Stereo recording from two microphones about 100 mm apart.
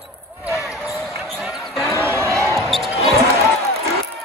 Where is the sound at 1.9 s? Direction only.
25° right (ahead or behind).